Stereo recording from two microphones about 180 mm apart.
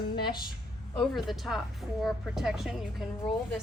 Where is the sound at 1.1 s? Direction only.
Centre (ahead or behind).